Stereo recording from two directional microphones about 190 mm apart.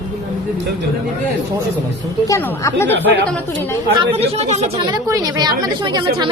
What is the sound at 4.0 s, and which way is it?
Speech, 35° right (ahead or behind).